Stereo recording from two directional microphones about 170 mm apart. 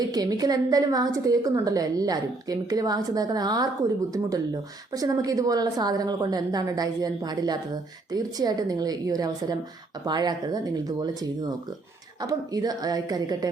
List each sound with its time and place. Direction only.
0.1 s speech: 20° right (ahead or behind)